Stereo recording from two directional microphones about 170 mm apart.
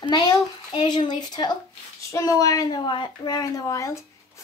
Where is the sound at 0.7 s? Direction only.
25° left (ahead or behind).